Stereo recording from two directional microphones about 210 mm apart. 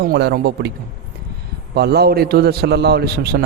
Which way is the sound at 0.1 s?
50° right (ahead or behind).